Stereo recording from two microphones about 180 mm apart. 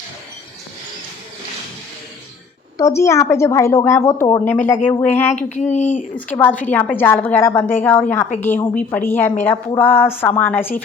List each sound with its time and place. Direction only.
2.7 s a woman's voice: 15° left (ahead or behind)
5.4 s speech: 45° left (ahead or behind)
6.1 s a woman's voice: 10° left (ahead or behind)